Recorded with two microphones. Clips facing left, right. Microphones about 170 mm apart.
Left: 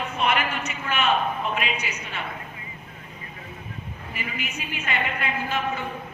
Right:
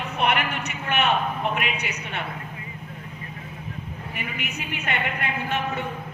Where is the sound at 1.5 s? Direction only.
65° right (ahead or behind).